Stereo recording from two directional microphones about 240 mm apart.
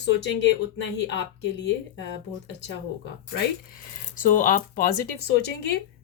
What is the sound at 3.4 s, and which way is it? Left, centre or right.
Speech, left.